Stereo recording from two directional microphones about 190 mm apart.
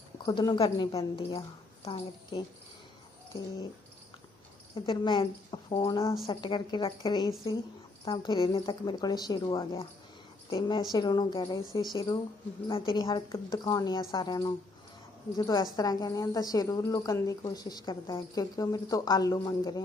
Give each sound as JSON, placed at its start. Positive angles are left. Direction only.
{"t": 0.3, "sound": "a woman's voice", "side_deg": 20}
{"t": 4.7, "sound": "a woman's voice", "side_deg": 25}